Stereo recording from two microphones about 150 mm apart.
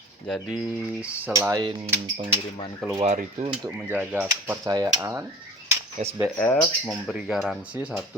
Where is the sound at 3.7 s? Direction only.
15° right (ahead or behind).